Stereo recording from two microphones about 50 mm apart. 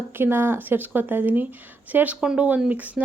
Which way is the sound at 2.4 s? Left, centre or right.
Right.